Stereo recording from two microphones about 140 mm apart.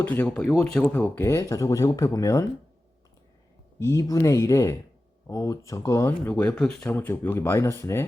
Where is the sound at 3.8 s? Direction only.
20° left (ahead or behind).